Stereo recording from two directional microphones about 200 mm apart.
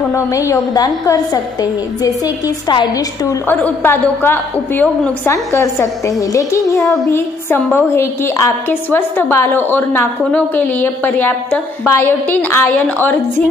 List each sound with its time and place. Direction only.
0.1 s a woman's voice: 15° left (ahead or behind)
3.4 s a woman's voice: 10° left (ahead or behind)